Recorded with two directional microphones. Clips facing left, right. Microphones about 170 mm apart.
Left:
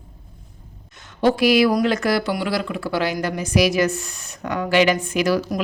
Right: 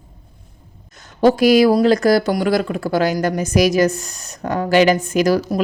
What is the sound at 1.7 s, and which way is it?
Speech, 35° right (ahead or behind).